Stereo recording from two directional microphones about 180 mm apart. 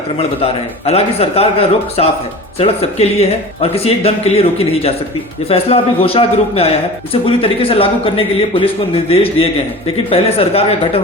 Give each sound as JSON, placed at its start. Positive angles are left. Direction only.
{"t": 0.2, "sound": "a man's voice", "side_deg": 35}